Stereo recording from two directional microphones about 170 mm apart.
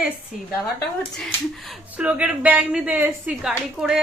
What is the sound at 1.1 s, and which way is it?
A woman's voice, centre (ahead or behind).